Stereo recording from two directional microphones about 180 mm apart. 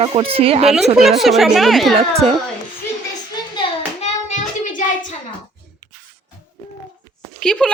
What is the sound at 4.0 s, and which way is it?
Hands, 40° left (ahead or behind).